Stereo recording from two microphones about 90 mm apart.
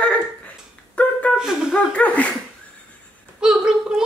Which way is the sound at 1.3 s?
5° right (ahead or behind).